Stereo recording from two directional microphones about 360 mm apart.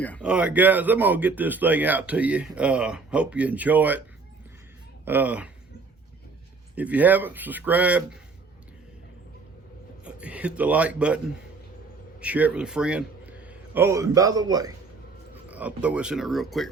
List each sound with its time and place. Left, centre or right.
0.0 s speech: centre
5.0 s speech: centre
6.7 s speech: centre
10.0 s a man's voice: centre
12.2 s a man's voice: centre